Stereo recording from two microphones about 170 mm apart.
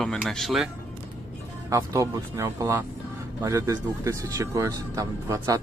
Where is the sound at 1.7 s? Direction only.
20° right (ahead or behind).